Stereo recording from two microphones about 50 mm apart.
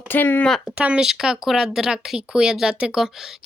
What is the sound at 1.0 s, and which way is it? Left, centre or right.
Speech, centre.